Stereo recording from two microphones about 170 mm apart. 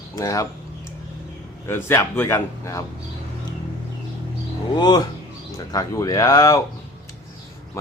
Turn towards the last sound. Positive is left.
turn(degrees=20)  # may be behind; listen again after turning